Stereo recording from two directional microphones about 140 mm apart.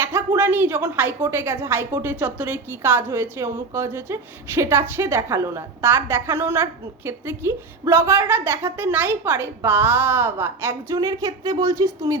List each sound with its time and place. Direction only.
0.0 s a woman's voice: 15° right (ahead or behind)